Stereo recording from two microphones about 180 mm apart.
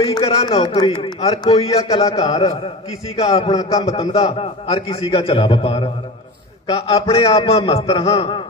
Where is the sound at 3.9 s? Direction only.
30° left (ahead or behind).